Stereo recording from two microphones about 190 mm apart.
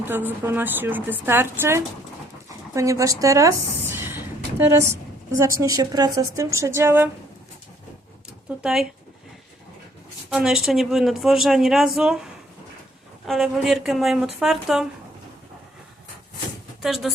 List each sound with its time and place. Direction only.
0.1 s a woman's voice: 10° right (ahead or behind)
5.4 s a woman's voice: 15° right (ahead or behind)
8.4 s speech: 5° right (ahead or behind)
10.2 s speech: 5° right (ahead or behind)
13.2 s speech: centre (ahead or behind)
16.8 s speech: centre (ahead or behind)